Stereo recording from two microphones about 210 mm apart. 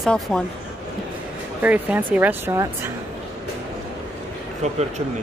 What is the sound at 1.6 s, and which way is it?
Speech, 10° right (ahead or behind).